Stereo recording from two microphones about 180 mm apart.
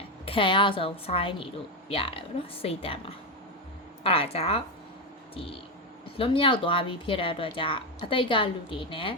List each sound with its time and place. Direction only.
0.3 s a woman's voice: 30° left (ahead or behind)
4.0 s a woman's voice: 35° left (ahead or behind)
5.3 s a sound: 30° left (ahead or behind)
6.1 s speech: 30° left (ahead or behind)